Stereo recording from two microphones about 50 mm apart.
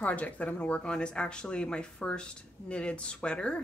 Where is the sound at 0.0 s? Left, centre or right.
Left.